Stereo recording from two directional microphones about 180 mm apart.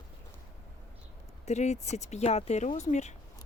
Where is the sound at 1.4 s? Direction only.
40° left (ahead or behind).